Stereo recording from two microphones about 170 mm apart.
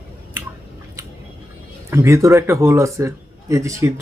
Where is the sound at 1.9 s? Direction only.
15° right (ahead or behind).